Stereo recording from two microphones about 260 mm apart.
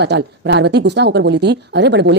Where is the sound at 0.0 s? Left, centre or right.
Right.